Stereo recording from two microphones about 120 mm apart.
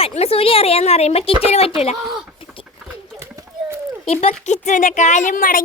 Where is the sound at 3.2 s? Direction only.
25° right (ahead or behind).